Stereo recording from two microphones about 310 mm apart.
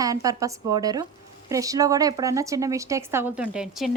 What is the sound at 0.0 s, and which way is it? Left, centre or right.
A woman's voice, centre.